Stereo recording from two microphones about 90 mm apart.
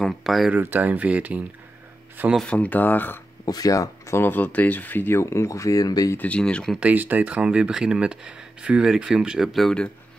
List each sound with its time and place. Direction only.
0.0 s speech: centre (ahead or behind)
0.5 s speech: 20° right (ahead or behind)
2.5 s speech: 15° left (ahead or behind)
3.4 s speech: 45° left (ahead or behind)
4.2 s speech: 20° left (ahead or behind); by 6.1 s 40° left (ahead or behind)
6.1 s speech: 15° left (ahead or behind)
6.8 s speech: 20° right (ahead or behind); by 9.8 s 5° left (ahead or behind)